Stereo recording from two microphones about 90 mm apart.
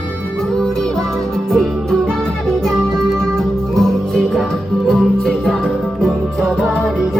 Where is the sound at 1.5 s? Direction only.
Centre (ahead or behind).